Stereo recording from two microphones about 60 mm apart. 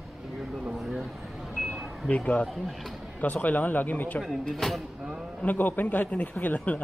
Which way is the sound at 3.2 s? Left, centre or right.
Left.